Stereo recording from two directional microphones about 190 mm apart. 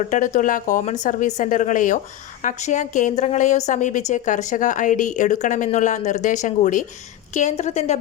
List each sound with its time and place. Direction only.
0.0 s a woman's voice: 40° left (ahead or behind)